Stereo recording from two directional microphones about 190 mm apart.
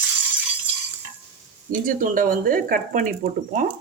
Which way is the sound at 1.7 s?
45° right (ahead or behind).